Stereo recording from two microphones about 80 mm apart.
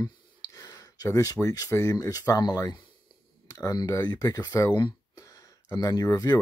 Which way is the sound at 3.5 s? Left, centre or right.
Left.